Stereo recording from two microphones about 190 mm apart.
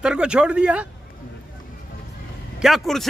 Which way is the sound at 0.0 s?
5° right (ahead or behind).